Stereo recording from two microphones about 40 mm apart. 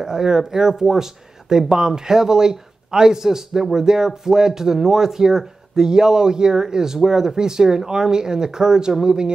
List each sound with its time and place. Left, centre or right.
0.0 s speech: centre